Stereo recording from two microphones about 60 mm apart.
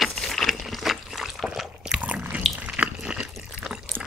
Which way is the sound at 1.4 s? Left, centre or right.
Centre.